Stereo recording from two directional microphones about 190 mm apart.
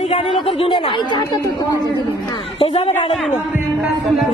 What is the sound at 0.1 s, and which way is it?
Speech, 30° left (ahead or behind).